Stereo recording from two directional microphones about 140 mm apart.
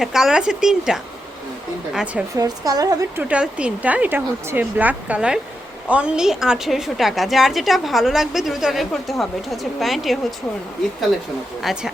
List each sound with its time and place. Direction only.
0.0 s a woman's voice: 5° right (ahead or behind)
2.3 s speech: 25° right (ahead or behind)
3.2 s a woman's voice: 10° right (ahead or behind)
11.6 s a woman's voice: 5° right (ahead or behind)